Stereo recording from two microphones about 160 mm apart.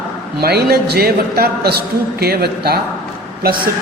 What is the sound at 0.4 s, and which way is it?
A man's voice, 80° right.